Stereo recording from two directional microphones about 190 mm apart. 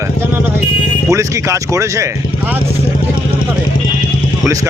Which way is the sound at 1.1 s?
15° right (ahead or behind).